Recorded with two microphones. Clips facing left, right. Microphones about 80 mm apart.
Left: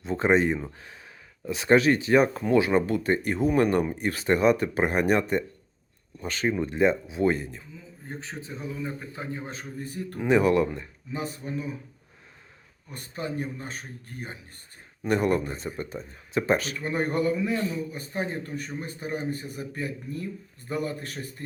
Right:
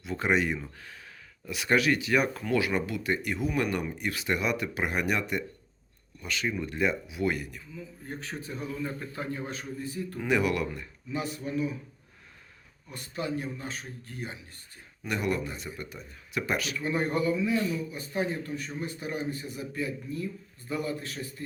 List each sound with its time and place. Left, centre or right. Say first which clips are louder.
0.0 s a man's voice: left 5 dB; left
9.5 s speech: even; left
9.8 s a man's voice: left 1 dB; left
10.2 s speech: left 6 dB; left
12.9 s a man's voice: even; left